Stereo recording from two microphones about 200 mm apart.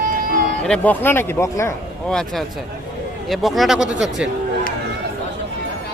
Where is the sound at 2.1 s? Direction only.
5° left (ahead or behind).